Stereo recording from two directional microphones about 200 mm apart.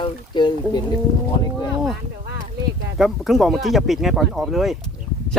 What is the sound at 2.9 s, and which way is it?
Speech, centre (ahead or behind).